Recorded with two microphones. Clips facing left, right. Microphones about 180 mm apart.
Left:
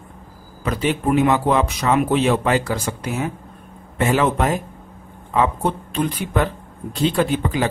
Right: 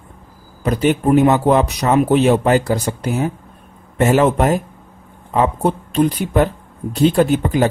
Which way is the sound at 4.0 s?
40° right (ahead or behind).